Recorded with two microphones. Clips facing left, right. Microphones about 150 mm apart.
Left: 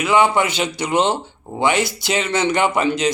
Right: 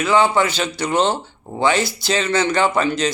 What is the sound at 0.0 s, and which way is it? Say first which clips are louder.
Speech: even; 20° left (ahead or behind).